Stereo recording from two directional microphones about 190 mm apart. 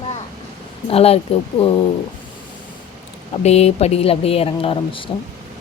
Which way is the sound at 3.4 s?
35° left (ahead or behind).